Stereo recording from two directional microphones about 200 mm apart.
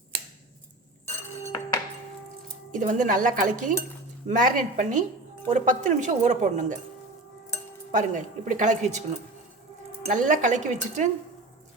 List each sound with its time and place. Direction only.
1.5 s music: 20° left (ahead or behind)
2.7 s a woman's voice: 40° right (ahead or behind)
7.9 s a woman's voice: 40° right (ahead or behind)
10.1 s a woman's voice: 40° right (ahead or behind)